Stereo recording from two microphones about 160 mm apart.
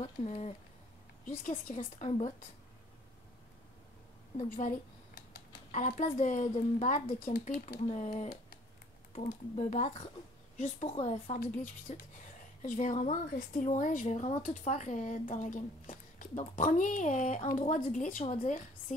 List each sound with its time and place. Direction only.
0.0 s speech: 45° left (ahead or behind)
1.7 s speech: 45° left (ahead or behind)
4.4 s a child's voice: 50° left (ahead or behind)
7.9 s speech: 45° left (ahead or behind)